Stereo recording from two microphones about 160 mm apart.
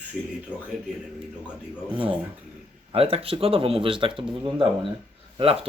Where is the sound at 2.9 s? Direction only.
35° right (ahead or behind).